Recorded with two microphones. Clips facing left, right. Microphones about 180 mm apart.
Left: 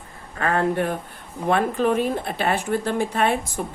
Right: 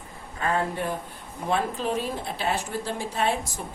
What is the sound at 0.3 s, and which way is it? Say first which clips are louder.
A woman's voice: left 5 dB; 60° left (ahead or behind).